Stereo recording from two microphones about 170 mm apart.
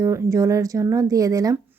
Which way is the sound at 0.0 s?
20° right (ahead or behind).